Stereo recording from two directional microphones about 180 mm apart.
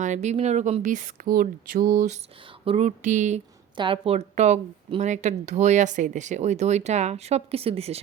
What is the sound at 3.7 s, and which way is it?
Speech, 30° right (ahead or behind).